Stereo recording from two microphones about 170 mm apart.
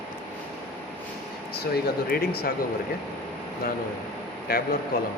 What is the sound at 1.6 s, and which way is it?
Speech, 65° left (ahead or behind).